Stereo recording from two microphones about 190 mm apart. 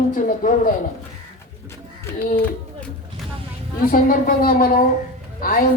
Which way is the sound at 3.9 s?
45° left (ahead or behind).